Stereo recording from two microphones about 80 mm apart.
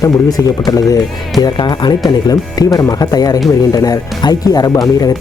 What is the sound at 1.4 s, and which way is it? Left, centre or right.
Speech, left.